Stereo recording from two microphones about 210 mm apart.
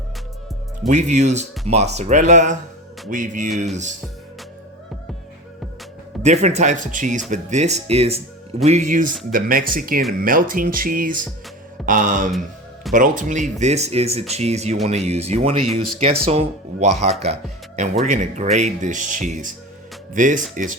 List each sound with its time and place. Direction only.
0.9 s speech: 35° right (ahead or behind)
6.2 s speech: 30° right (ahead or behind)